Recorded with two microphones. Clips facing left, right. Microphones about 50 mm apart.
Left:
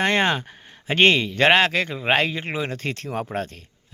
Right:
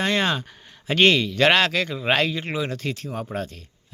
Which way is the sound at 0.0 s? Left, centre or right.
Left.